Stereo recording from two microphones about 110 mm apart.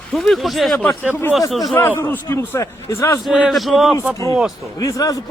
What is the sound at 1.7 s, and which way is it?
A man's voice, 20° left (ahead or behind).